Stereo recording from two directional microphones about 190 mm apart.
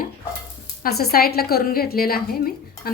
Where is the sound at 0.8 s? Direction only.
55° left (ahead or behind).